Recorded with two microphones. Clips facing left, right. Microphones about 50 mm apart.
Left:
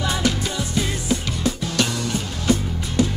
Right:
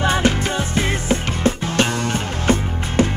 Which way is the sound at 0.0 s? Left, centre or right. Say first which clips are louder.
Right 5 dB; right.